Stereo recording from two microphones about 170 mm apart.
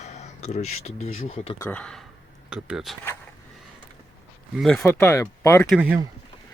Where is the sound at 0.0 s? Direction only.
40° left (ahead or behind).